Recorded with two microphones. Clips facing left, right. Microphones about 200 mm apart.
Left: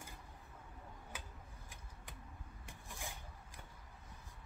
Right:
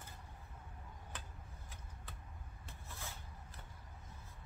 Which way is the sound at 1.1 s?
10° left (ahead or behind).